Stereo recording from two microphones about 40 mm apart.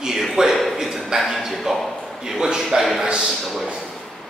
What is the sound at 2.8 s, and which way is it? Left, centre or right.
Speech, centre.